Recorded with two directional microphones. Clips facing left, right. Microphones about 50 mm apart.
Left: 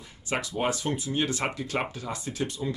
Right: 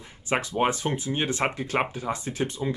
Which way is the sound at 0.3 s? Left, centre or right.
Right.